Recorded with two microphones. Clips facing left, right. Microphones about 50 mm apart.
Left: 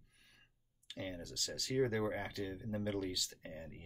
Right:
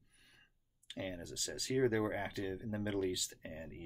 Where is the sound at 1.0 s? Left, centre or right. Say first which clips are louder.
Right 1 dB; centre.